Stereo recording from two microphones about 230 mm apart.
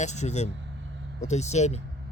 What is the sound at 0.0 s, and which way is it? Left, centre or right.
Speech, left.